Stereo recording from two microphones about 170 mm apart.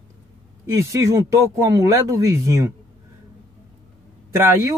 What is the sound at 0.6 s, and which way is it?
Speech, 20° right (ahead or behind).